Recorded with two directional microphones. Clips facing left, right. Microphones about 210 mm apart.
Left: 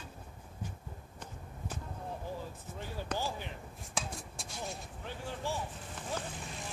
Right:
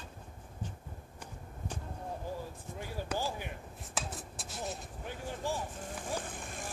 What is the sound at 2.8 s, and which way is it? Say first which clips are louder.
Basketball bounce: right 1 dB; 10° right (ahead or behind).